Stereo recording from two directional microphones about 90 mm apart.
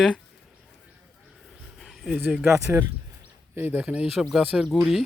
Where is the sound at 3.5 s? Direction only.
20° right (ahead or behind).